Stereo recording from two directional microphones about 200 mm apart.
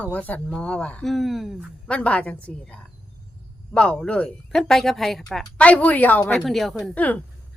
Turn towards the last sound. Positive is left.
turn(degrees=5)  # may be behind; listen again after turning